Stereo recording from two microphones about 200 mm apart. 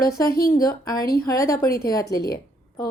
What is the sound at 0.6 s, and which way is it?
Speech, 20° left (ahead or behind).